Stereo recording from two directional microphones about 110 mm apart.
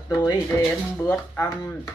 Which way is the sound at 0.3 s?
35° left (ahead or behind).